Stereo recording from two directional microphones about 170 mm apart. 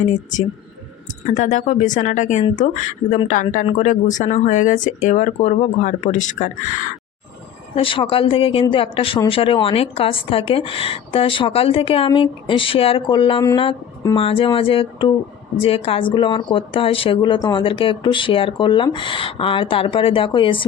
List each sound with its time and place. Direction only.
0.0 s speech: 45° left (ahead or behind)
7.8 s a woman's voice: 30° left (ahead or behind)